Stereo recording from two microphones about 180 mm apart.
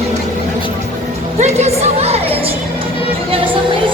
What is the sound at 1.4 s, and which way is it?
Music, 35° right (ahead or behind).